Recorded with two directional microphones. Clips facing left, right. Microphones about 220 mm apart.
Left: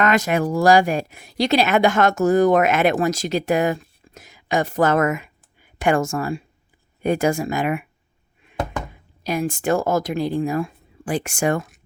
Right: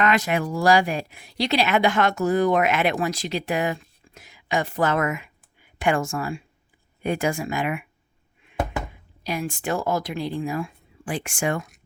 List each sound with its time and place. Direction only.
0.0 s speech: 45° left (ahead or behind)
9.2 s speech: 45° left (ahead or behind)